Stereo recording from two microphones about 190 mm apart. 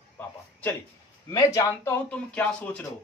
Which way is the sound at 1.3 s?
20° left (ahead or behind).